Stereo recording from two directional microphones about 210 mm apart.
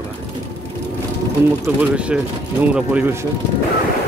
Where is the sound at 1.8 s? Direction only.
5° right (ahead or behind).